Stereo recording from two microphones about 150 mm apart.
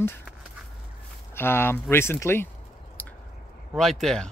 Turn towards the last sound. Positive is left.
turn(degrees=5)  # may be behind; listen again after turning